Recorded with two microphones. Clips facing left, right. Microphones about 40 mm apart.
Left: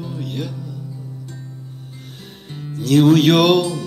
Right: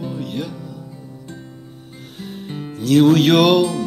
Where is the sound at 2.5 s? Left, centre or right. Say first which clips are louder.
Right 1 dB; centre.